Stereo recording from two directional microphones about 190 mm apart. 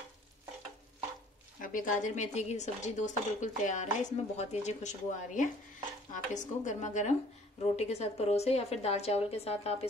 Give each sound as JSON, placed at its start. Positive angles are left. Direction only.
{"t": 1.6, "sound": "speech", "side_deg": 45}